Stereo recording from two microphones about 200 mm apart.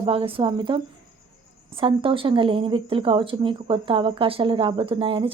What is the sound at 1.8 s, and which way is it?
Speech, 25° right (ahead or behind).